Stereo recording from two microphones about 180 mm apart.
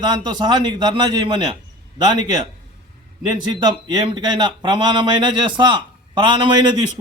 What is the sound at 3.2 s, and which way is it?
Speech, 25° right (ahead or behind).